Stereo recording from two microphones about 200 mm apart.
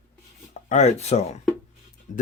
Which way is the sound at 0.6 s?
35° left (ahead or behind).